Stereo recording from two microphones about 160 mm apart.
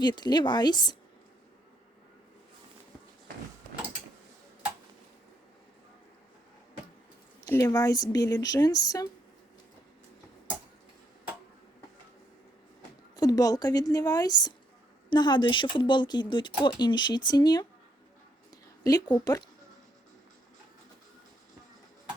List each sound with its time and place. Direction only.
0.0 s speech: 25° left (ahead or behind)
7.5 s speech: 20° left (ahead or behind)
13.1 s speech: 25° left (ahead or behind)
18.8 s speech: 25° left (ahead or behind)